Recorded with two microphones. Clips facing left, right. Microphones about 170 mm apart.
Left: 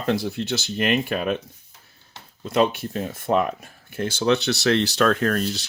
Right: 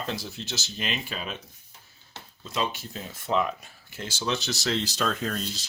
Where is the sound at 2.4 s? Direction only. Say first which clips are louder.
Left 10 dB; 60° left (ahead or behind).